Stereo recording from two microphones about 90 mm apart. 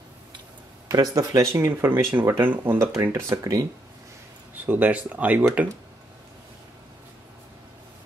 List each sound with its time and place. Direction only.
0.8 s speech: 45° right (ahead or behind); by 2.9 s 25° right (ahead or behind)
3.0 s speech: 35° right (ahead or behind)
4.6 s speech: 20° right (ahead or behind)